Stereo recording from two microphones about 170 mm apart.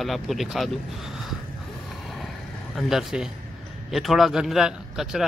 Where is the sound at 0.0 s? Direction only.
Centre (ahead or behind).